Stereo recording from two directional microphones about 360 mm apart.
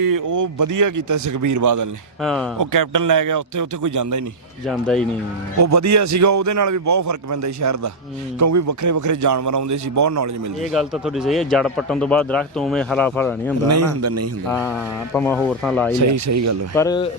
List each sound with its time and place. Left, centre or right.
0.0 s a man's voice: right
2.2 s a man's voice: centre
2.6 s a man's voice: right
4.6 s a man's voice: centre
5.5 s a man's voice: right
10.7 s a man's voice: centre
13.7 s a man's voice: right
14.4 s a man's voice: centre
16.0 s a man's voice: right
16.7 s a man's voice: centre